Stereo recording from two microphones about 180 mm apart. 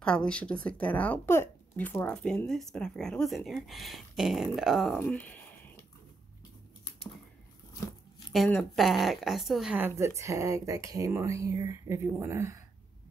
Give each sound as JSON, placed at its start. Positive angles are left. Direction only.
{"t": 0.0, "sound": "speech", "side_deg": 5}
{"t": 5.0, "sound": "speech", "side_deg": 10}
{"t": 8.3, "sound": "speech", "side_deg": 0}